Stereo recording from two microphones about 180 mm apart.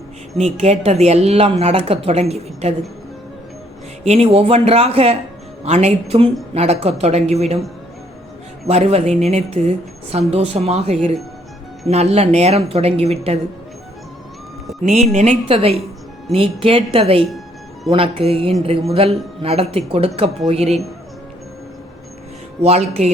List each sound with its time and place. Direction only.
0.3 s a woman's voice: 35° right (ahead or behind)
4.0 s a woman's voice: 35° right (ahead or behind)
8.6 s a woman's voice: 35° right (ahead or behind)
14.8 s a woman's voice: 40° right (ahead or behind)
22.6 s a woman's voice: 35° right (ahead or behind)